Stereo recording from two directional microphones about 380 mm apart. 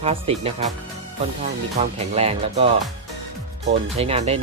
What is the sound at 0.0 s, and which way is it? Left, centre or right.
Speech, centre.